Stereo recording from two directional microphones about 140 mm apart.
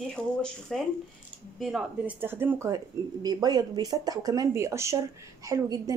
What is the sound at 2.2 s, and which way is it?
Speech, 15° right (ahead or behind).